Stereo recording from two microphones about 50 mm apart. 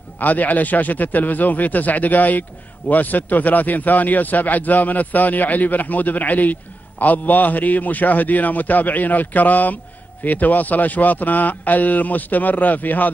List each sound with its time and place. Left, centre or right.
0.2 s a man's voice: left